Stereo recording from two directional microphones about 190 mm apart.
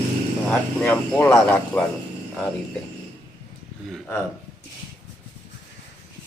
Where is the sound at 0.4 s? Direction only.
5° left (ahead or behind).